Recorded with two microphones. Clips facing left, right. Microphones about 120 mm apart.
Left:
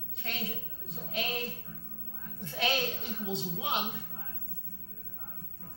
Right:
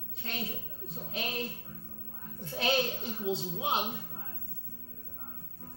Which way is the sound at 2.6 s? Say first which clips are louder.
Right 2 dB; 25° right (ahead or behind).